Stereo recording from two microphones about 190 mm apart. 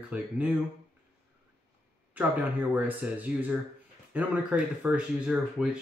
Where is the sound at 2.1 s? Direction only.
10° right (ahead or behind).